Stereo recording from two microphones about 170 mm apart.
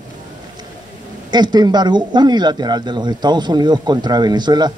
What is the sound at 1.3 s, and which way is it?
A man's voice, 25° right (ahead or behind).